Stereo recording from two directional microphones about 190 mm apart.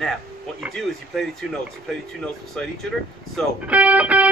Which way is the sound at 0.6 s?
Centre (ahead or behind).